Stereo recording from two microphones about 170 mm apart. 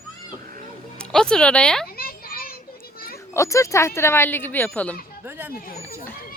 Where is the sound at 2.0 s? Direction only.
60° left (ahead or behind).